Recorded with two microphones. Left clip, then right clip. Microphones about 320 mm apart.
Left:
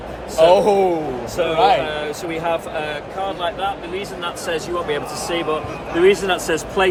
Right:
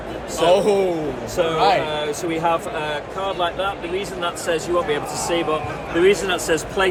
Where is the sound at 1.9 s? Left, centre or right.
Centre.